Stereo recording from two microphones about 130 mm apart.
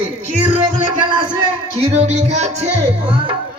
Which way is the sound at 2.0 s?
55° right (ahead or behind).